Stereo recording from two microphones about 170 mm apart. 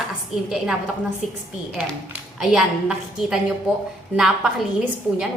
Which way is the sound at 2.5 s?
5° right (ahead or behind).